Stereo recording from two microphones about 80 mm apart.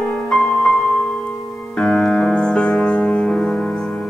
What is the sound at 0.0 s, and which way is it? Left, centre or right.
Music, centre.